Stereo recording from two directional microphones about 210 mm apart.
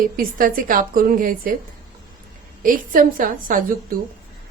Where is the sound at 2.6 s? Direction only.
40° right (ahead or behind).